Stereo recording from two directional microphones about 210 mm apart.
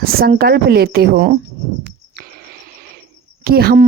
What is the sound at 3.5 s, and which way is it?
Speech, 50° right (ahead or behind).